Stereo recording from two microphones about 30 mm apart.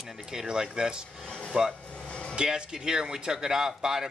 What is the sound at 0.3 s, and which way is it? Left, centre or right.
A man's voice, right.